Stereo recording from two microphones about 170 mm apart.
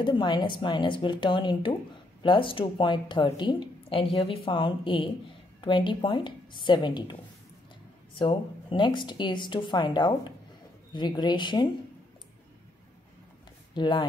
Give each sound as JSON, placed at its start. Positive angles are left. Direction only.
{"t": 0.0, "sound": "a woman's voice", "side_deg": 30}
{"t": 8.2, "sound": "a woman's voice", "side_deg": 30}
{"t": 13.7, "sound": "a woman's voice", "side_deg": 30}